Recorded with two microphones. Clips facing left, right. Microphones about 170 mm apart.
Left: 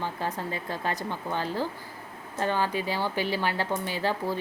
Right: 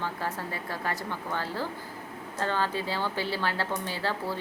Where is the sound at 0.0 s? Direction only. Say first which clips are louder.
Left 2 dB; 20° left (ahead or behind).